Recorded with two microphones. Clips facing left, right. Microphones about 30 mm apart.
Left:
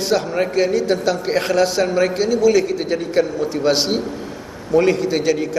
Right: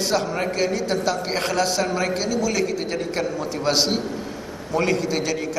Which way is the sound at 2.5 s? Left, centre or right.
Centre.